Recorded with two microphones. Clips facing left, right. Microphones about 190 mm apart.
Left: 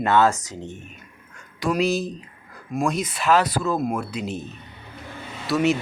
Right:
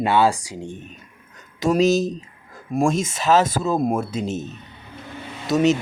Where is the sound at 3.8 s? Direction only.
45° right (ahead or behind).